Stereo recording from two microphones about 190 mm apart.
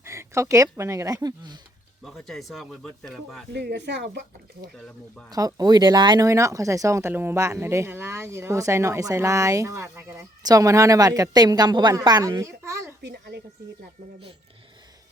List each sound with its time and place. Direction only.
0.0 s speech: 15° right (ahead or behind)
2.0 s speech: centre (ahead or behind)
3.5 s speech: 60° right (ahead or behind)
4.7 s speech: 5° left (ahead or behind)
5.3 s speech: 20° right (ahead or behind)
13.0 s speech: 65° right (ahead or behind)